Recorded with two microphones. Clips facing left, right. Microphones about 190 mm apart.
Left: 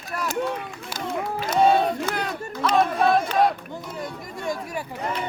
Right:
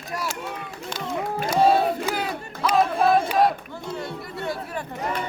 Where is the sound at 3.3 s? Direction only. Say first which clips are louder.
Even; centre (ahead or behind).